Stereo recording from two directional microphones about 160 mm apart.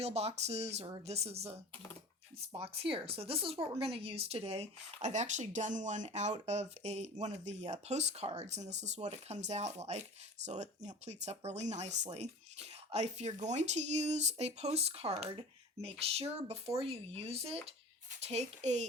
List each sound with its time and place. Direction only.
0.0 s speech: 40° right (ahead or behind)
2.7 s speech: 35° right (ahead or behind)